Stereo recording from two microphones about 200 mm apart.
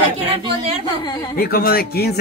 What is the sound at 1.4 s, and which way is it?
Speech, 50° left (ahead or behind).